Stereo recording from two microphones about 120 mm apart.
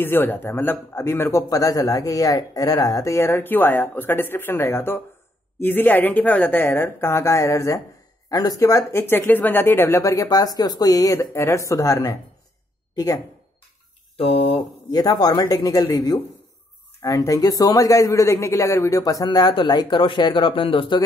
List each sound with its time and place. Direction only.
0.0 s a man's voice: 20° left (ahead or behind)
14.1 s speech: 50° left (ahead or behind)
14.9 s speech: 30° left (ahead or behind)
17.0 s speech: 25° left (ahead or behind); by 21.0 s 45° left (ahead or behind)